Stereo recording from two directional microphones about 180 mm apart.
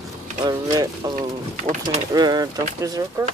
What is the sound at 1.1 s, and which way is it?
Speech, 40° right (ahead or behind).